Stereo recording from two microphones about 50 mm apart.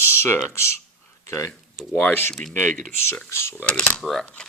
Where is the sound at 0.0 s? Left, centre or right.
Left.